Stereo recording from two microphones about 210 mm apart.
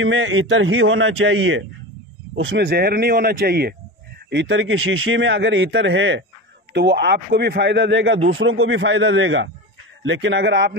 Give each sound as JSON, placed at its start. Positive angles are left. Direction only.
{"t": 0.0, "sound": "a man's voice", "side_deg": -65}
{"t": 2.6, "sound": "speech", "side_deg": -50}
{"t": 4.3, "sound": "a man's voice", "side_deg": -60}